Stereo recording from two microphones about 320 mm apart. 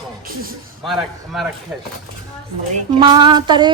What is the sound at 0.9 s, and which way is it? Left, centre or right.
Speech, centre.